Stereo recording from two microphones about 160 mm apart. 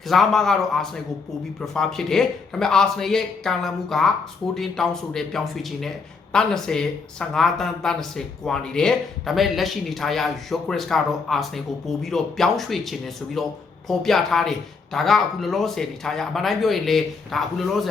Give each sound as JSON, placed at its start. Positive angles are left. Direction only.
{"t": 0.1, "sound": "speech", "side_deg": 0}